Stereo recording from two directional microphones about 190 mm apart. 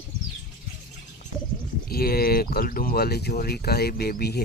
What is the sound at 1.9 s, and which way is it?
Speech, 50° left (ahead or behind).